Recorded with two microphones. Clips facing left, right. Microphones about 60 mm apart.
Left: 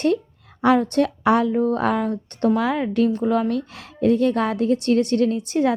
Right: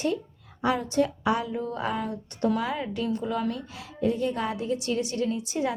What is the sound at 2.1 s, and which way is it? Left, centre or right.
A woman's voice, left.